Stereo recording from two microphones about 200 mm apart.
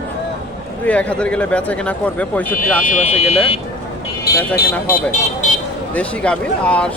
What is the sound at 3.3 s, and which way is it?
Speech, 30° left (ahead or behind).